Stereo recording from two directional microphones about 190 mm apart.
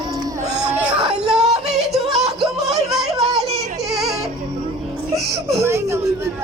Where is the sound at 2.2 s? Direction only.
Centre (ahead or behind).